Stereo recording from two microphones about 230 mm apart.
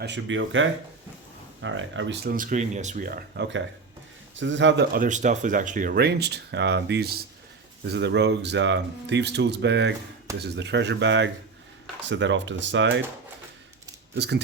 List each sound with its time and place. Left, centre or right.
0.0 s speech: right
2.3 s speech: right
4.9 s speech: right
14.2 s speech: right